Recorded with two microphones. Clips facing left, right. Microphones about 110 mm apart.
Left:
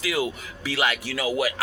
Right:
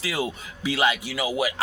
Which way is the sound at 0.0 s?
30° right (ahead or behind).